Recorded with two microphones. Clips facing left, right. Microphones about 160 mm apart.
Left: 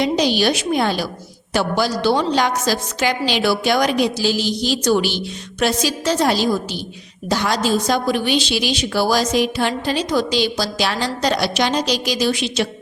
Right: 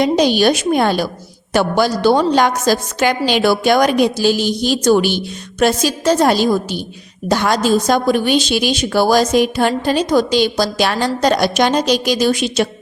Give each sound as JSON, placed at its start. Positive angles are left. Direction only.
{"t": 0.0, "sound": "a woman's voice", "side_deg": -50}